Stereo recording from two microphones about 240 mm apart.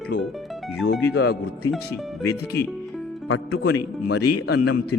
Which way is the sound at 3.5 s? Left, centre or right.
Left.